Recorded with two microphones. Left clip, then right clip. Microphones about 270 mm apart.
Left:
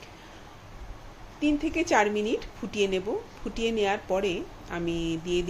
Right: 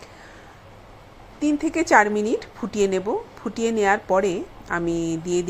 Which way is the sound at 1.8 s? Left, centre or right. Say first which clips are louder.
Right 7 dB; centre.